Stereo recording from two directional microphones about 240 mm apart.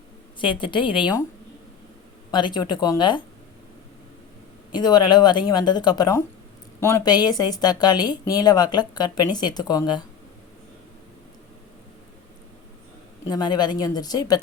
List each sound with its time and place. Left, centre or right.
0.3 s a woman's voice: left
2.3 s a woman's voice: centre
4.7 s a woman's voice: centre
13.2 s a woman's voice: centre